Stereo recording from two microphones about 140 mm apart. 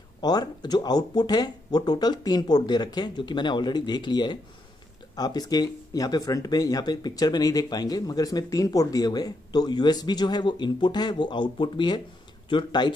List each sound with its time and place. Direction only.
0.2 s speech: 30° left (ahead or behind)